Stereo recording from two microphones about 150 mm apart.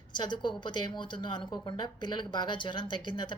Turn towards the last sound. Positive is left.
turn(degrees=30)  # may be behind; listen again after turning